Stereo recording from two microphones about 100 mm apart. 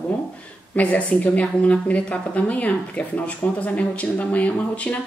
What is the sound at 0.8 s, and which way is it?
A woman's voice, 15° left (ahead or behind).